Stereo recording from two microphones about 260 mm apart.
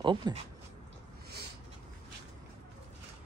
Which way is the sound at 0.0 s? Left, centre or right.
Centre.